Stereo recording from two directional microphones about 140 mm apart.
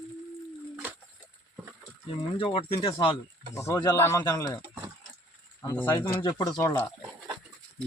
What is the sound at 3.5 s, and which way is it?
Speech, 20° left (ahead or behind).